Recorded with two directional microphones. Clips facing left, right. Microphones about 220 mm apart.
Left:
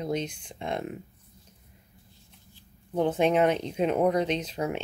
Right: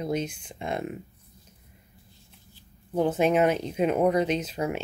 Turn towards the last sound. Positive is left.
turn(degrees=-5)  # may be behind; listen again after turning